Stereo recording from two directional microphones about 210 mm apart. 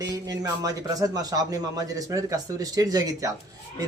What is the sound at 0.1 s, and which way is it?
A man's voice, 15° right (ahead or behind).